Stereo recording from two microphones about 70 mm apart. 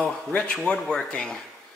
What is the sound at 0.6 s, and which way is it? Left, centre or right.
Speech, centre.